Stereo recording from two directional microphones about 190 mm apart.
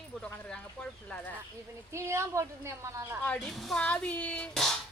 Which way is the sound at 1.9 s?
15° right (ahead or behind).